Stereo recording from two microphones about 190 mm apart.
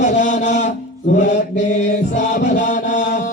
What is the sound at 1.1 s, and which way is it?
Mantra, 40° left (ahead or behind).